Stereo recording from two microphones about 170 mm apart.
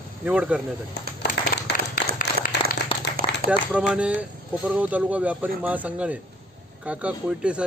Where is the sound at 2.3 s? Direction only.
30° left (ahead or behind).